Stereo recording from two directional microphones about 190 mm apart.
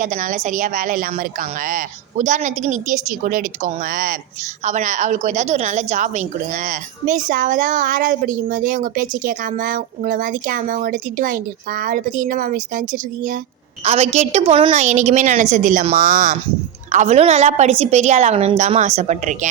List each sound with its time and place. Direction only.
0.0 s a woman's voice: 45° right (ahead or behind)